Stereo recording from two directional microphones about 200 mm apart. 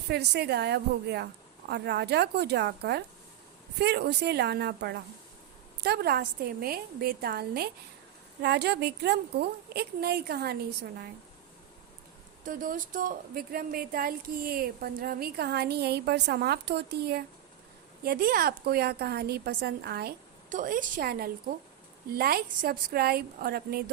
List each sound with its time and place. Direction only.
0.1 s speech: 55° right (ahead or behind)
12.5 s speech: 40° right (ahead or behind)